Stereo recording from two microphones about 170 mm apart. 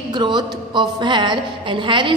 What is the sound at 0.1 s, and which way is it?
A woman's voice, 25° right (ahead or behind).